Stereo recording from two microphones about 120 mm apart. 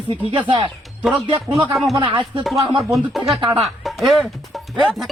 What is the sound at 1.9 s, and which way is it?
Speech, 40° right (ahead or behind).